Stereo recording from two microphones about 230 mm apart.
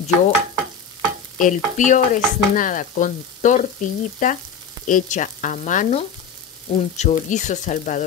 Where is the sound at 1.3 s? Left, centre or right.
Left.